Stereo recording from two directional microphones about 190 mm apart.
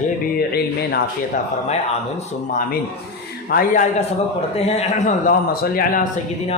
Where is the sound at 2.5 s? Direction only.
45° left (ahead or behind).